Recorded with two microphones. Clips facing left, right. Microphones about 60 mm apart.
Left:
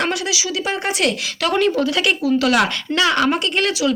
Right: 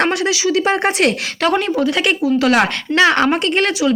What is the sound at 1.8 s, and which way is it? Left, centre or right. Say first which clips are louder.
A woman's voice: right 2 dB; right.